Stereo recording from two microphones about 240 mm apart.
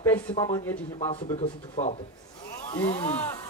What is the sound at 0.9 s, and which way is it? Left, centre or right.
Speech, left.